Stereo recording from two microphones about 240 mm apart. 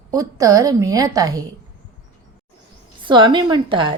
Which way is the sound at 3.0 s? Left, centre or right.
Centre.